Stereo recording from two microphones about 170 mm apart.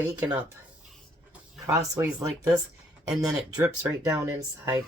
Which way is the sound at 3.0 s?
5° right (ahead or behind).